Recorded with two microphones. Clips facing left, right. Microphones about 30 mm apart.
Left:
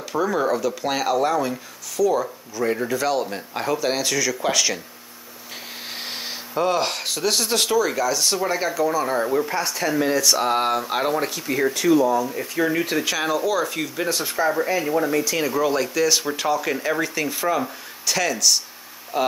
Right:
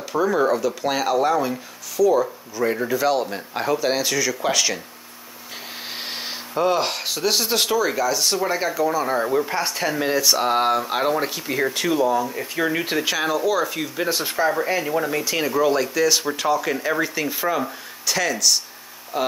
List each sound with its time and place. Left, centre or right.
0.1 s speech: centre
5.9 s speech: centre